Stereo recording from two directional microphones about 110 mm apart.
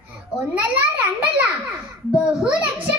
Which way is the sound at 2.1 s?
5° right (ahead or behind).